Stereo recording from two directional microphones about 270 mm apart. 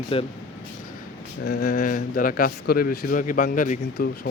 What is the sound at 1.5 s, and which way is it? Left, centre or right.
Speech, left.